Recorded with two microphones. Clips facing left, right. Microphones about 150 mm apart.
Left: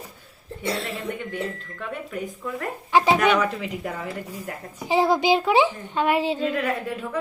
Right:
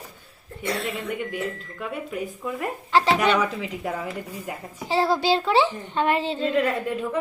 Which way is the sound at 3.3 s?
5° right (ahead or behind).